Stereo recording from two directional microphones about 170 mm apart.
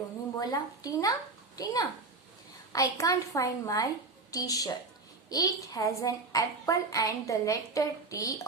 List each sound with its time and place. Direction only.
0.3 s a woman's voice: 20° left (ahead or behind)